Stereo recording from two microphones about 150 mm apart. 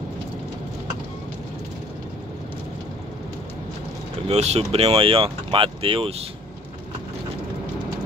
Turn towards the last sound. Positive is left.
turn(degrees=-40)  # may be behind; listen again after turning